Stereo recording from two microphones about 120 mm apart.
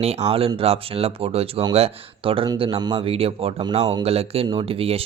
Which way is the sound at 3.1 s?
55° right (ahead or behind).